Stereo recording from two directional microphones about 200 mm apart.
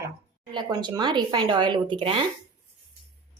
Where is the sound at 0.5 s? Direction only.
20° right (ahead or behind).